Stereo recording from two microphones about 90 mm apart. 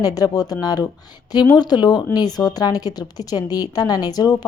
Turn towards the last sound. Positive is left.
turn(degrees=45)  # may be behind; listen again after turning